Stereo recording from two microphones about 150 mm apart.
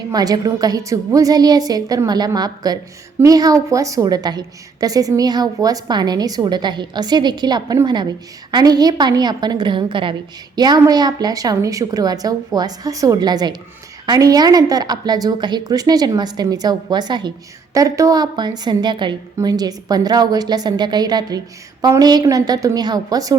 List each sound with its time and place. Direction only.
0.1 s a woman's voice: 25° right (ahead or behind)